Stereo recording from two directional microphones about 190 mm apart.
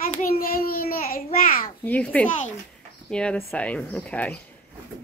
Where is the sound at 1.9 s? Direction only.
10° left (ahead or behind).